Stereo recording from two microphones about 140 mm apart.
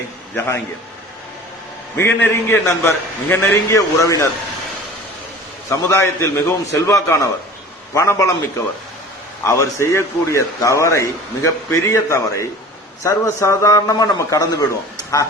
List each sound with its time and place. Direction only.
0.3 s a man's voice: 20° left (ahead or behind)
2.0 s a man's voice: 20° left (ahead or behind)
5.6 s a man's voice: 20° left (ahead or behind)
9.4 s a man's voice: 20° left (ahead or behind)